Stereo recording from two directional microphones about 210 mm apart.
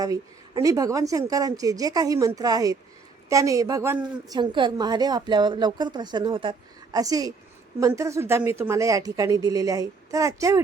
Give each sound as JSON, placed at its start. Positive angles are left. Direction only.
{"t": 0.0, "sound": "a woman's voice", "side_deg": -15}